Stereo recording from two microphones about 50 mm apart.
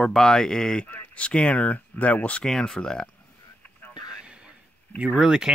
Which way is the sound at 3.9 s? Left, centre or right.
Centre.